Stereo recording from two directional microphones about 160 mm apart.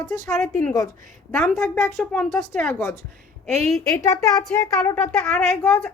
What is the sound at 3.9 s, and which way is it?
Speech, 20° left (ahead or behind).